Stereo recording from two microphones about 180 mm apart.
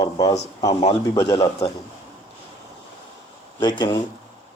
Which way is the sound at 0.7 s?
35° left (ahead or behind).